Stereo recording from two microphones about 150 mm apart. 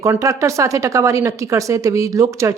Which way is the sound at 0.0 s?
20° right (ahead or behind).